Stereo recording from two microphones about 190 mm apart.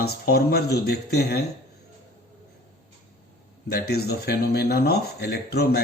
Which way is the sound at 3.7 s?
55° left (ahead or behind).